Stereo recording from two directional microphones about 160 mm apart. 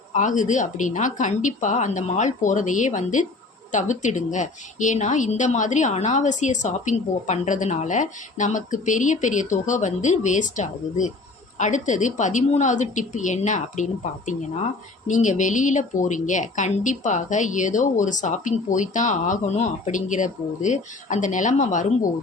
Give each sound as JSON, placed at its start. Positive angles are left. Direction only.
{"t": 0.1, "sound": "a woman's voice", "side_deg": 50}